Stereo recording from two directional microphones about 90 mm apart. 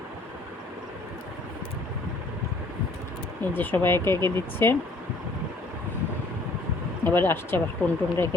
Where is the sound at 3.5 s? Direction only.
25° left (ahead or behind).